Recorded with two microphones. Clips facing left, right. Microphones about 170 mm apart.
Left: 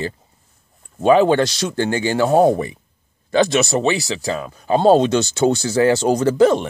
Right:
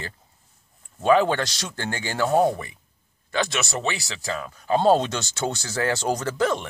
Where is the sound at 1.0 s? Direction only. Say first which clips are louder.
Left 6 dB; 20° left (ahead or behind).